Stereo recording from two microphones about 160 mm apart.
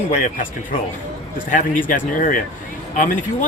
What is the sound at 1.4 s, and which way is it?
Speech, 55° left (ahead or behind).